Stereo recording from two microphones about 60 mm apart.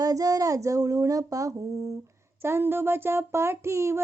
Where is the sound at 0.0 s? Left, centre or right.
Right.